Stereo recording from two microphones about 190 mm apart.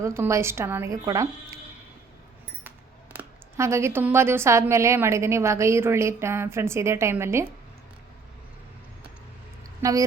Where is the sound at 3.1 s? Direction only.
15° right (ahead or behind).